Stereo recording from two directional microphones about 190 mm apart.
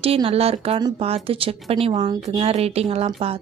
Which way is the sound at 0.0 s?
30° right (ahead or behind).